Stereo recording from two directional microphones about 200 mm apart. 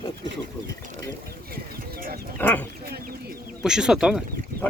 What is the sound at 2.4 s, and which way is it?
Speech, 10° left (ahead or behind).